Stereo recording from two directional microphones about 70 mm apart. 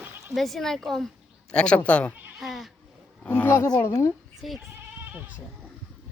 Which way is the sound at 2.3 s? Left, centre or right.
Centre.